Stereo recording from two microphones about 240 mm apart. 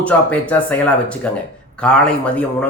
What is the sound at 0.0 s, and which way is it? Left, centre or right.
Speech, centre.